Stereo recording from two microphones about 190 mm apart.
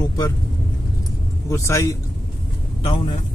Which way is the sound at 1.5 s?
15° left (ahead or behind).